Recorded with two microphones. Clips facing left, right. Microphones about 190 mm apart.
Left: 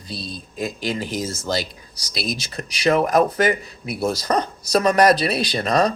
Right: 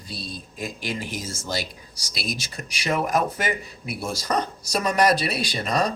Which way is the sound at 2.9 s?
40° left (ahead or behind).